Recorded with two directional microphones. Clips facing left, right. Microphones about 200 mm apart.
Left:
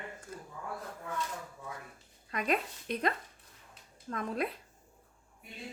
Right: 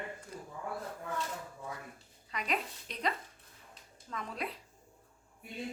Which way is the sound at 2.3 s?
50° left (ahead or behind).